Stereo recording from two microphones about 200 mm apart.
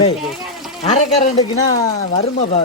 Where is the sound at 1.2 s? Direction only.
20° left (ahead or behind).